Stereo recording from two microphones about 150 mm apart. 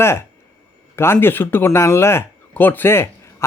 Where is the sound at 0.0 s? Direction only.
15° left (ahead or behind).